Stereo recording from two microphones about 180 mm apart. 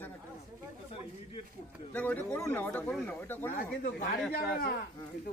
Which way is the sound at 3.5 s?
45° left (ahead or behind).